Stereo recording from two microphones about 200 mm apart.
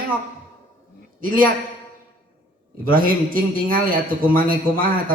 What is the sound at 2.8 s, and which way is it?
A man's voice, 45° right (ahead or behind).